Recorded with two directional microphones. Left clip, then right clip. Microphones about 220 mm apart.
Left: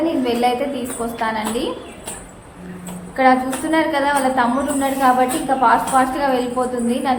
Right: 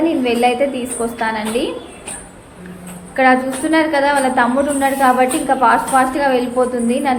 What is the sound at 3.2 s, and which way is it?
A woman's voice, 15° right (ahead or behind).